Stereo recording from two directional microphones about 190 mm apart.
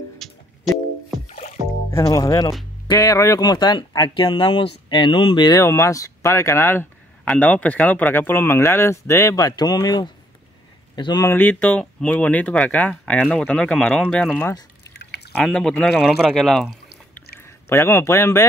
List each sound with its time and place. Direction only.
0.2 s music: centre (ahead or behind)
1.3 s music: 35° left (ahead or behind)
1.9 s speech: 15° left (ahead or behind)
15.0 s pour: 60° left (ahead or behind)
15.3 s speech: 5° left (ahead or behind)
17.6 s speech: 15° left (ahead or behind)